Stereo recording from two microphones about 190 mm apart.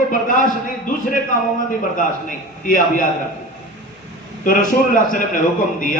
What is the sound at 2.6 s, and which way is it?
Speech, 45° left (ahead or behind).